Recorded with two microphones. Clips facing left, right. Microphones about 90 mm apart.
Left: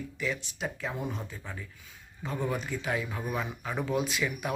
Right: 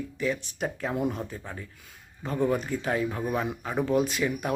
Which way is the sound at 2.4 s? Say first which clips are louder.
Right 6 dB; 40° right (ahead or behind).